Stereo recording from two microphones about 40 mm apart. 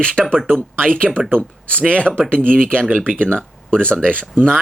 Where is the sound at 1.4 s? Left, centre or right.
Left.